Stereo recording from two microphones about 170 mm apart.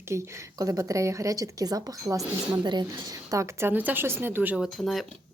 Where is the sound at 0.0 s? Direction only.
15° right (ahead or behind).